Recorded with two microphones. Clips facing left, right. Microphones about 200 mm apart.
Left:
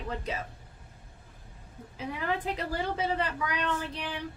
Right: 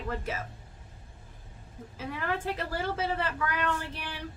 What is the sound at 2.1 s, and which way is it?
A woman's voice, 15° left (ahead or behind).